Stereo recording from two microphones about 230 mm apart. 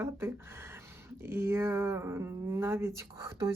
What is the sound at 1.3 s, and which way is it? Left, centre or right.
Speech, centre.